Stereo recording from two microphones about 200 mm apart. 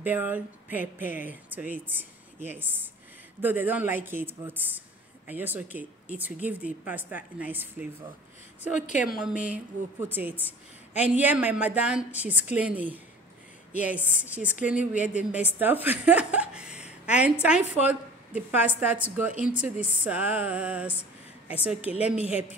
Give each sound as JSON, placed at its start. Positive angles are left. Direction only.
{"t": 0.0, "sound": "a woman's voice", "side_deg": -10}
{"t": 8.7, "sound": "a man's voice", "side_deg": 40}
{"t": 9.2, "sound": "a woman's voice", "side_deg": -5}
{"t": 22.2, "sound": "a man's voice", "side_deg": 30}